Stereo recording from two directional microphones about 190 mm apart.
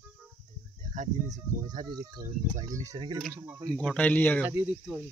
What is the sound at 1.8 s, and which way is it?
Speech, 25° right (ahead or behind).